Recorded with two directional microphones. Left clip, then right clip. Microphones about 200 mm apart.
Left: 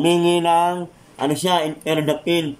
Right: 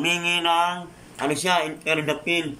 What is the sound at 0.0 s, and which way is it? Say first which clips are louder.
Speech: left 5 dB; 30° left (ahead or behind).